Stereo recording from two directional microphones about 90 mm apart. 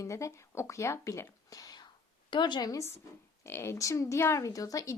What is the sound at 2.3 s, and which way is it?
Speech, 60° left (ahead or behind).